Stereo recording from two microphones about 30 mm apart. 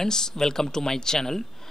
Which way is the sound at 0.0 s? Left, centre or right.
Centre.